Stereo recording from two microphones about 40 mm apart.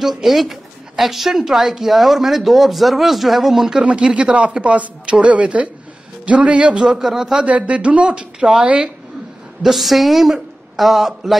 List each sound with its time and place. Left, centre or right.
0.0 s speech: centre
3.8 s speech: right
7.0 s speech: centre
7.4 s speech: right
9.6 s speech: centre